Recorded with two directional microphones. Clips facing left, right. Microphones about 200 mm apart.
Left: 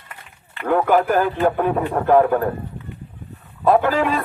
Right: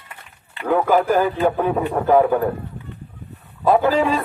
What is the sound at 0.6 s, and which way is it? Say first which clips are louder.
A man's voice: even; 5° right (ahead or behind).